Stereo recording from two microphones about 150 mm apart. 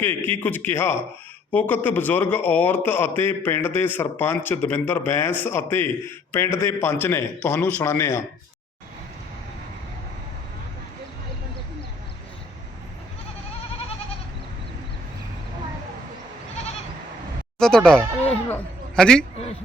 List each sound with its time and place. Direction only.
0.0 s a man's voice: 15° left (ahead or behind)
17.6 s speech: 5° left (ahead or behind)
18.4 s a sound: 10° left (ahead or behind)